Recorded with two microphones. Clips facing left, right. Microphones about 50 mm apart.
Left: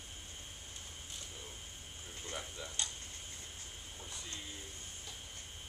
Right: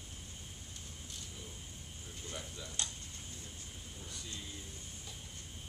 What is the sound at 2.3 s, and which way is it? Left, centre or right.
Tick-tock, left.